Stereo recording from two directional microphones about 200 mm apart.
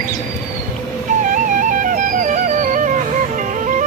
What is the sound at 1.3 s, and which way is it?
Music, 40° right (ahead or behind).